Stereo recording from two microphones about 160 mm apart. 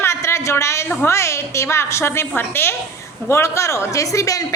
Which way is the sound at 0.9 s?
15° left (ahead or behind).